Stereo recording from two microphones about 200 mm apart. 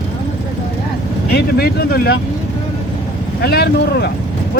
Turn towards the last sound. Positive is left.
turn(degrees=55)  # may be behind; listen again after turning